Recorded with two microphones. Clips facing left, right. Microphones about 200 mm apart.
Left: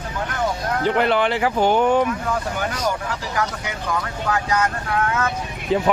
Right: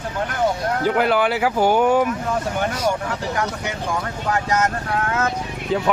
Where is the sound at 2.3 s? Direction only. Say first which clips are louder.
Right 2 dB; 25° right (ahead or behind).